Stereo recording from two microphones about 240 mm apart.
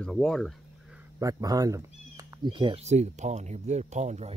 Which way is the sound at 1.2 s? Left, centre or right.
Centre.